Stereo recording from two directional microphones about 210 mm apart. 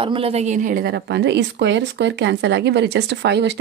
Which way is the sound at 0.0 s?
25° right (ahead or behind).